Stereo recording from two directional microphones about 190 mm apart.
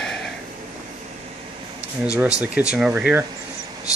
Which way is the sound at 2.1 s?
5° right (ahead or behind).